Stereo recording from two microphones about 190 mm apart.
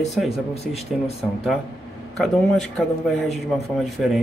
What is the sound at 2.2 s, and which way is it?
Speech, centre (ahead or behind).